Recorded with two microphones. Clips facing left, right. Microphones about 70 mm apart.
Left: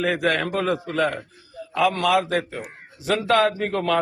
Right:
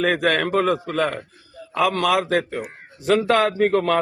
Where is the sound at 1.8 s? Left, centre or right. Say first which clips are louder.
Even; right.